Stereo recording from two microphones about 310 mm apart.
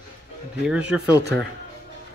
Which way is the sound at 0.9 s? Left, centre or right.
Centre.